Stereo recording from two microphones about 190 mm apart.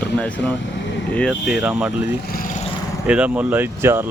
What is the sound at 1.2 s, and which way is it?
Speech, centre (ahead or behind).